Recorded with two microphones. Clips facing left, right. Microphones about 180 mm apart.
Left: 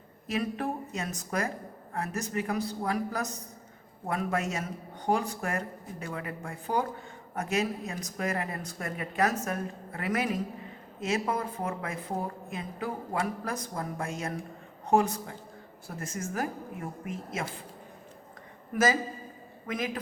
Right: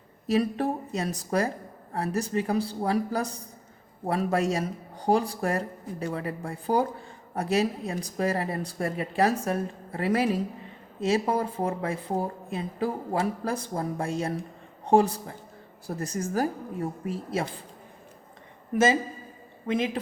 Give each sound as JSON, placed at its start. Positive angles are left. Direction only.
{"t": 0.3, "sound": "a woman's voice", "side_deg": -35}
{"t": 18.7, "sound": "a woman's voice", "side_deg": -25}